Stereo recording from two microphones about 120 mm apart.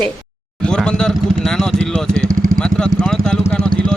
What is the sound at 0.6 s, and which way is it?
Speech, 5° left (ahead or behind).